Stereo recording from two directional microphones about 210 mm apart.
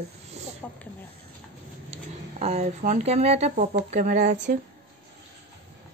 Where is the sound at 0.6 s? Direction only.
10° left (ahead or behind).